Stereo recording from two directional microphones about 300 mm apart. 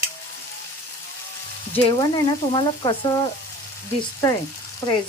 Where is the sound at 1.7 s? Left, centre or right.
Centre.